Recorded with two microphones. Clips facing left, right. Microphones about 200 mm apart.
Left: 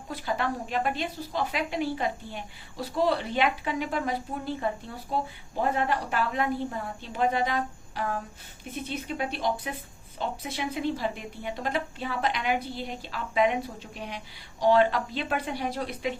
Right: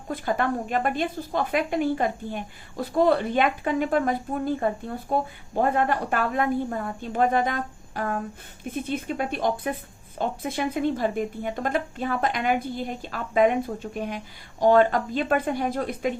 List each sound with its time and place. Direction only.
0.1 s a woman's voice: 50° right (ahead or behind)